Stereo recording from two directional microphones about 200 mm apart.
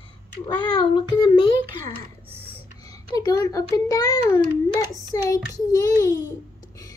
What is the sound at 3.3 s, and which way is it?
A child's voice, 20° left (ahead or behind).